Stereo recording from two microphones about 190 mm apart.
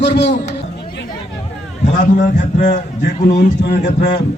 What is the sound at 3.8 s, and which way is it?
Speech, 60° left (ahead or behind).